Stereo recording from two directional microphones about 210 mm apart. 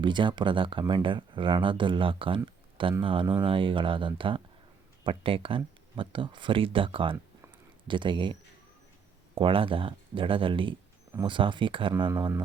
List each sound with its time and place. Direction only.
0.0 s speech: 25° right (ahead or behind)